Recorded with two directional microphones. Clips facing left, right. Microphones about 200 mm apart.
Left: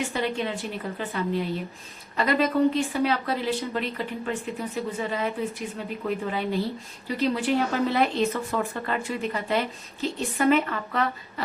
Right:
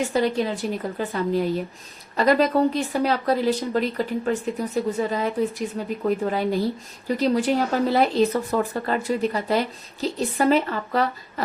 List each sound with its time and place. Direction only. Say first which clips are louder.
0.1 s speech: right 5 dB; 40° right (ahead or behind)